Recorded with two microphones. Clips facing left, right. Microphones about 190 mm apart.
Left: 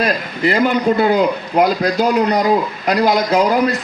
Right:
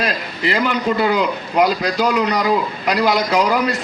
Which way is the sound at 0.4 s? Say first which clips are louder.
Left 4 dB; 45° left (ahead or behind).